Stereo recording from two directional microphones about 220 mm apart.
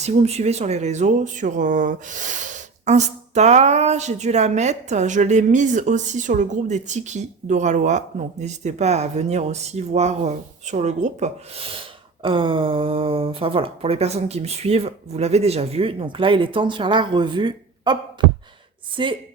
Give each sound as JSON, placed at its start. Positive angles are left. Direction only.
{"t": 0.0, "sound": "speech", "side_deg": -30}
{"t": 18.2, "sound": "a sound", "side_deg": -20}
{"t": 19.0, "sound": "speech", "side_deg": -25}